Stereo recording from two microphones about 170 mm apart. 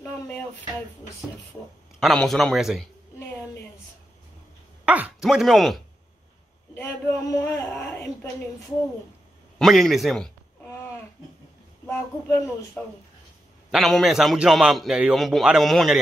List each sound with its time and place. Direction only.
2.0 s a man's voice: centre (ahead or behind)
4.8 s speech: 5° right (ahead or behind)
6.7 s speech: 15° left (ahead or behind)
9.6 s a man's voice: centre (ahead or behind)
11.8 s speech: 10° left (ahead or behind)
13.7 s a man's voice: centre (ahead or behind)